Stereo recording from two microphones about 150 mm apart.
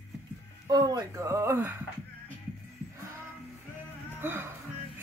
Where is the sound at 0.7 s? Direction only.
25° right (ahead or behind).